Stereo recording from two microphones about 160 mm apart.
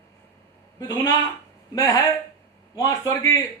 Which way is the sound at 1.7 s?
20° left (ahead or behind).